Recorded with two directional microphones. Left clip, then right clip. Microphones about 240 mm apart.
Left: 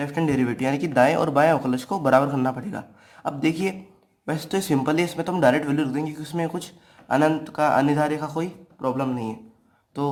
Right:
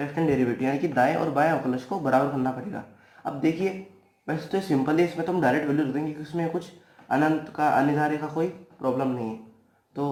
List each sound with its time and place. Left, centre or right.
0.0 s speech: left